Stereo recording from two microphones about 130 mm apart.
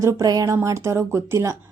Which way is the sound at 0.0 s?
25° right (ahead or behind).